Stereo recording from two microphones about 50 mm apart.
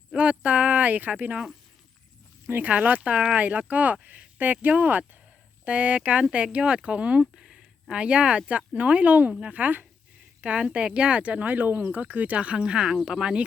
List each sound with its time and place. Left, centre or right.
0.2 s speech: right
2.5 s speech: right
10.4 s speech: right